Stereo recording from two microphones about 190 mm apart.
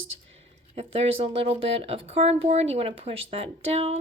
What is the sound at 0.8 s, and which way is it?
Speech, 35° right (ahead or behind).